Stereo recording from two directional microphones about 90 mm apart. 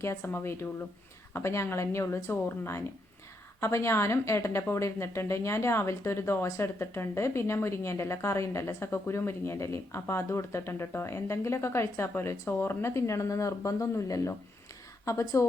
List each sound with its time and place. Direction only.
0.0 s speech: 30° left (ahead or behind)